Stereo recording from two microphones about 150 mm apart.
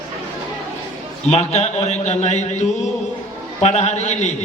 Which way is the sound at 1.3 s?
45° left (ahead or behind).